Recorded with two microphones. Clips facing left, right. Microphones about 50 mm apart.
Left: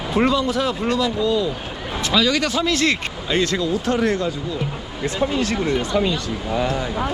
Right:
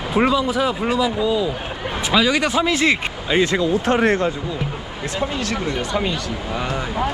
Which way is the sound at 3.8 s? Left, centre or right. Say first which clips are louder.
Right 3 dB; right.